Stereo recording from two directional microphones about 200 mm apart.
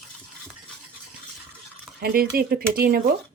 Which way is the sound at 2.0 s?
45° right (ahead or behind).